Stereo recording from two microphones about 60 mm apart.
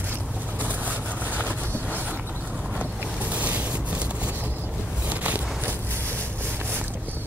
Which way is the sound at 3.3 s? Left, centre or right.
Right.